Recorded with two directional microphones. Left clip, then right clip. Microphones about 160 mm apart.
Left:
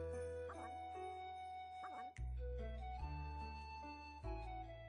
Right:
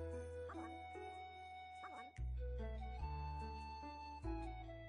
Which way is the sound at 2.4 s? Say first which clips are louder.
Left 1 dB; 35° right (ahead or behind).